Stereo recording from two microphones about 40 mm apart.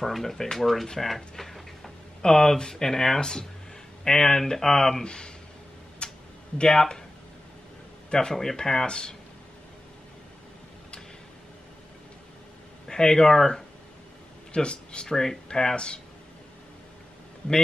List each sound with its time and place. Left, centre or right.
0.0 s speech: centre
1.0 s a sound: centre
2.2 s speech: centre
5.0 s speech: left
6.0 s tick-tock: left
6.6 s speech: centre
8.1 s speech: centre
12.8 s speech: centre
14.5 s speech: left